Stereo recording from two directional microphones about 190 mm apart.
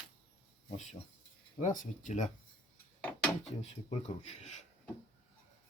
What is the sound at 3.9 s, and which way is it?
Speech, 35° left (ahead or behind).